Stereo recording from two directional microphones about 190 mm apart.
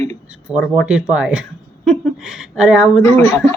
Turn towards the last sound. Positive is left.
turn(degrees=15)  # may be behind; listen again after turning